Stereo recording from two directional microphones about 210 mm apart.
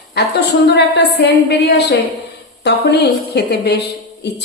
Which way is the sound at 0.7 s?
50° left (ahead or behind).